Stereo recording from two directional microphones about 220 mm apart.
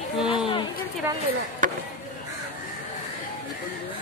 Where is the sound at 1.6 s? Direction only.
35° right (ahead or behind).